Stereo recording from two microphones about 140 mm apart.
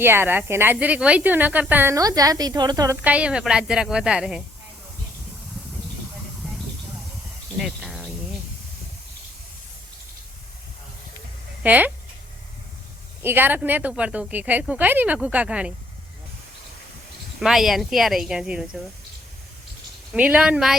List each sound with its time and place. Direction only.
0.0 s speech: 15° right (ahead or behind)
2.0 s a woman's voice: 25° right (ahead or behind)
3.0 s a woman's voice: 10° right (ahead or behind)
7.6 s cricket: centre (ahead or behind)
11.6 s speech: 10° right (ahead or behind)
13.2 s speech: 15° right (ahead or behind)
17.4 s a woman's voice: centre (ahead or behind)
20.1 s speech: 10° right (ahead or behind)